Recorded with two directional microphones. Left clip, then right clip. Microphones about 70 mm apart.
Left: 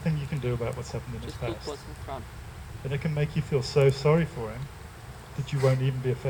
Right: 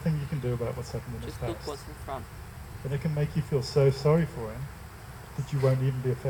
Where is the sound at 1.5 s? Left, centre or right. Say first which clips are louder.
Even; right.